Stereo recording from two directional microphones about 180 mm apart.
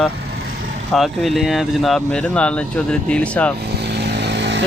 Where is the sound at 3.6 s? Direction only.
65° right (ahead or behind).